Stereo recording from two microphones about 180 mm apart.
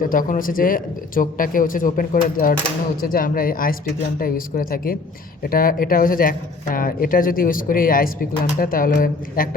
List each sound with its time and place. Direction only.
0.0 s speech: 50° left (ahead or behind)